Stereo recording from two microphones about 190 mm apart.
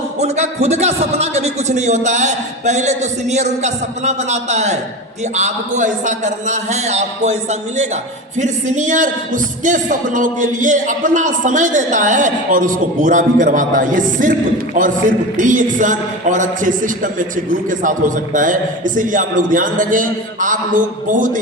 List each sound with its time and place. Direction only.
0.2 s a man's voice: 35° right (ahead or behind)
8.4 s speech: 40° right (ahead or behind)